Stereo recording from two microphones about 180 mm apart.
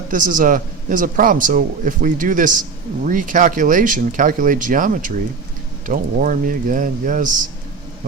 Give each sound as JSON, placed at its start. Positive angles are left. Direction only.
{"t": 0.1, "sound": "speech", "side_deg": -50}